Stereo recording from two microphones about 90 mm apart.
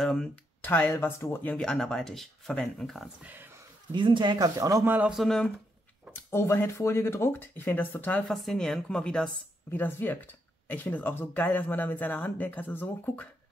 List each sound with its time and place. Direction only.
0.0 s speech: 5° left (ahead or behind)
0.6 s speech: 20° left (ahead or behind)
1.4 s speech: 10° left (ahead or behind)
3.2 s speech: 20° right (ahead or behind)
3.9 s speech: 65° right (ahead or behind)
4.4 s a man's voice: 35° right (ahead or behind)
4.8 s speech: 20° right (ahead or behind)
5.1 s speech: centre (ahead or behind)
6.3 s speech: 30° left (ahead or behind)
8.3 s speech: 5° left (ahead or behind)
9.7 s speech: 25° left (ahead or behind)